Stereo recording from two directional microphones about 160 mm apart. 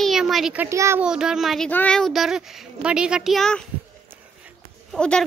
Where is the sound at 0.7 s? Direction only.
15° right (ahead or behind).